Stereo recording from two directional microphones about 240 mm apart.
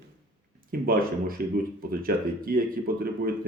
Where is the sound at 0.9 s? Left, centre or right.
Right.